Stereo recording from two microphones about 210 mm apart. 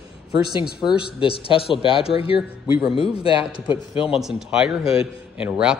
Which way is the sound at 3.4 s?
5° right (ahead or behind).